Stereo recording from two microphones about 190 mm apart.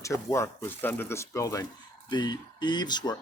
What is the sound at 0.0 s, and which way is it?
Speech, 15° left (ahead or behind).